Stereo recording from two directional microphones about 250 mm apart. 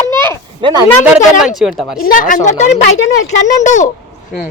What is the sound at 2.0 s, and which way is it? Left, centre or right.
Speech, left.